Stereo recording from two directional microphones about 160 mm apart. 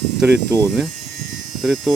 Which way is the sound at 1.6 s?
Centre (ahead or behind).